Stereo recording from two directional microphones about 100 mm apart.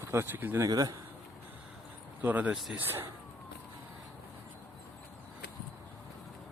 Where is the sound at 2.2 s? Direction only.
15° right (ahead or behind).